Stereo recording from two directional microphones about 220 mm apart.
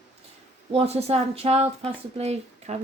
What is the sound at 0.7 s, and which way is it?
Speech, 25° right (ahead or behind).